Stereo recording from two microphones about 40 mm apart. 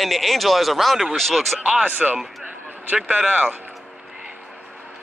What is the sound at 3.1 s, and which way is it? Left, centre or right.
Speech, right.